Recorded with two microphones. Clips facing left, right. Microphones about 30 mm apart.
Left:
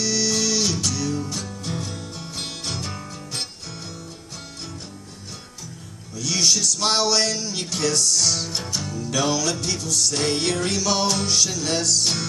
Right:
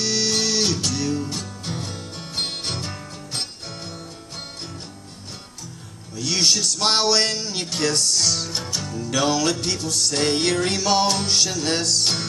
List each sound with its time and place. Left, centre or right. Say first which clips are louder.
0.0 s music: right 1 dB; right
6.1 s music: right 1 dB; right
8.5 s music: even; centre
9.4 s music: right 2 dB; right